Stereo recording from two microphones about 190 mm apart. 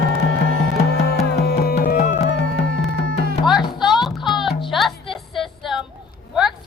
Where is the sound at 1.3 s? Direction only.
55° left (ahead or behind).